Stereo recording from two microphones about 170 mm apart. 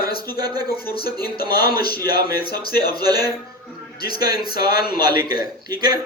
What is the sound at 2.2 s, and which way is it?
Speech, 65° left (ahead or behind).